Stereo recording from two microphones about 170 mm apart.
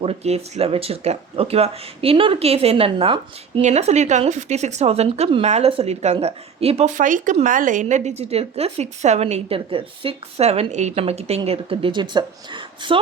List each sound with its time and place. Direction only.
0.0 s speech: 35° right (ahead or behind)